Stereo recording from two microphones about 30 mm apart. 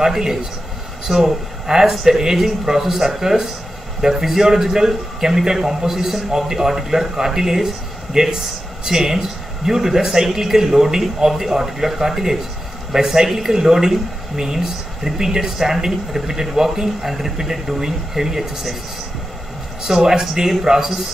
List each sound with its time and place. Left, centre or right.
0.0 s speech: centre
20.0 s speech: centre